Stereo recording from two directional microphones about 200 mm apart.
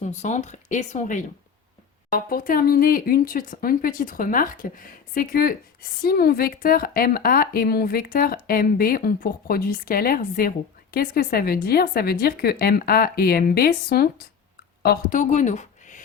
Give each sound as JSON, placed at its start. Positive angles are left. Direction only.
{"t": 0.0, "sound": "a woman's voice", "side_deg": 35}